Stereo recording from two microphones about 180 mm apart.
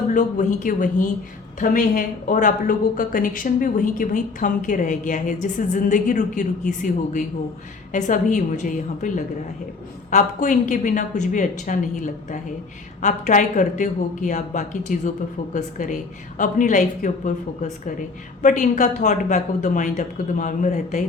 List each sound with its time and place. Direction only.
0.1 s a woman's voice: 45° left (ahead or behind)